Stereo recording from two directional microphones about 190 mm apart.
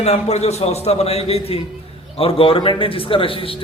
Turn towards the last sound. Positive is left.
turn(degrees=30)  # may be behind; listen again after turning